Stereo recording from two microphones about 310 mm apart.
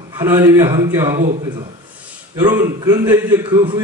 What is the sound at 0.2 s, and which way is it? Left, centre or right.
A man's voice, centre.